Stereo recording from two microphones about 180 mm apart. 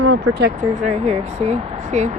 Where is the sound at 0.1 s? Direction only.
65° right (ahead or behind).